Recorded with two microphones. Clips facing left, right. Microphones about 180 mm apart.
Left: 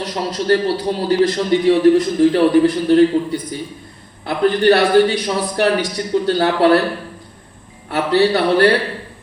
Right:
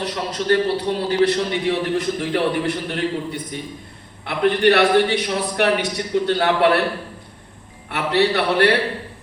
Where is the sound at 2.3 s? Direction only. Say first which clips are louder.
Left 8 dB; 35° left (ahead or behind).